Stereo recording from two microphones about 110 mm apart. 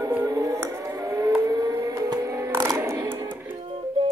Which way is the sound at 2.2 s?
25° right (ahead or behind).